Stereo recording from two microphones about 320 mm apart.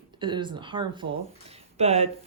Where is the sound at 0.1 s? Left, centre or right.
Centre.